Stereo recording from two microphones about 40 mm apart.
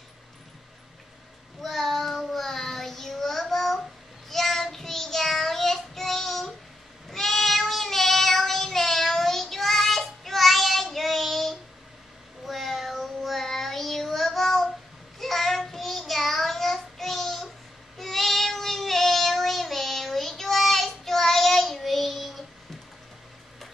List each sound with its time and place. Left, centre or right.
1.6 s child singing: centre